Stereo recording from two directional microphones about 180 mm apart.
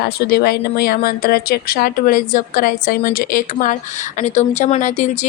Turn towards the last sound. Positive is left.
turn(degrees=40)  # may be behind; listen again after turning